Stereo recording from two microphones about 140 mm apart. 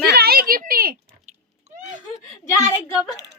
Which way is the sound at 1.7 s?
55° right (ahead or behind).